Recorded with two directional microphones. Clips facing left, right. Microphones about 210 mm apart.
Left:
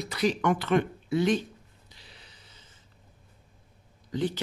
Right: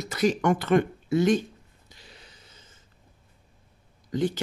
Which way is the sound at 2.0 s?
45° right (ahead or behind).